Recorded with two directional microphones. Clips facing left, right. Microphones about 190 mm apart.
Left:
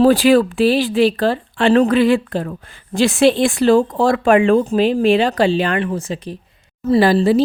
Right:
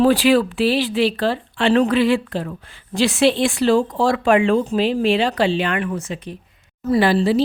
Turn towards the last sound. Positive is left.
turn(degrees=45)  # may be behind; listen again after turning